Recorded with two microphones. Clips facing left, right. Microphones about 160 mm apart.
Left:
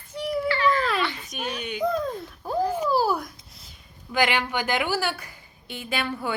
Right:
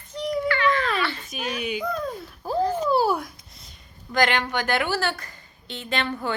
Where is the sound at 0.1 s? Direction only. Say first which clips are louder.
Right 1 dB; 5° left (ahead or behind).